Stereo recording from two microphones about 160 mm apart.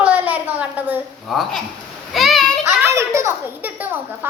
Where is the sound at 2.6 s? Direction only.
15° right (ahead or behind).